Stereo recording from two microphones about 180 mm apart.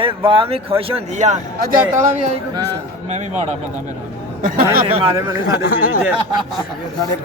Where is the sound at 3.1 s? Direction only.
40° right (ahead or behind).